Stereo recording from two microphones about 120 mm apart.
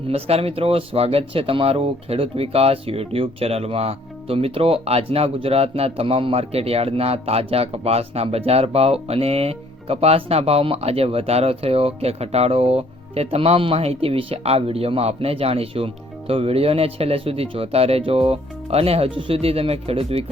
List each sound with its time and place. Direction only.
0.1 s speech: 55° right (ahead or behind)